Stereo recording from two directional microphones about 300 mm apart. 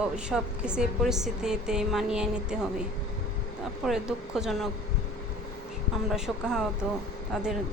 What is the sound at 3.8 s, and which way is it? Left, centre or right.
Speech, centre.